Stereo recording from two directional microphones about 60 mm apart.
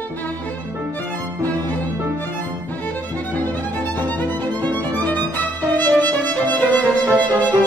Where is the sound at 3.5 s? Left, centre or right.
Left.